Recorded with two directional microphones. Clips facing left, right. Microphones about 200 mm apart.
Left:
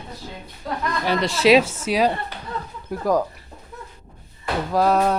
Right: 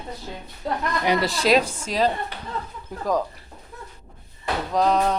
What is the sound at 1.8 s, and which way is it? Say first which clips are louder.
Cutlery: left 3 dB; 10° left (ahead or behind).